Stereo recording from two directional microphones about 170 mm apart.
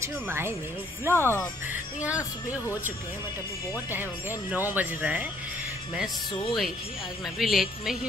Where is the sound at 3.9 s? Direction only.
10° right (ahead or behind).